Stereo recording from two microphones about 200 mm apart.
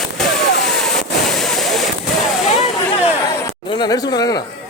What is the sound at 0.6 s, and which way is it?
Waterfall, centre (ahead or behind).